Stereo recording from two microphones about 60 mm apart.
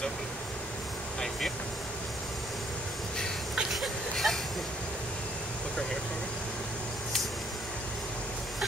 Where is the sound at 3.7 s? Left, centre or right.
Centre.